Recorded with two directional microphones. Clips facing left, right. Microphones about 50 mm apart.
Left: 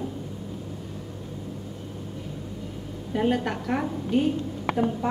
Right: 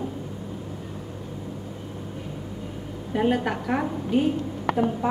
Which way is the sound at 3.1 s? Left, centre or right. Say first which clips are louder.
Right 1 dB; centre.